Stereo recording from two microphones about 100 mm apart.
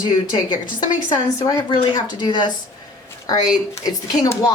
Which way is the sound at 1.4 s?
25° left (ahead or behind).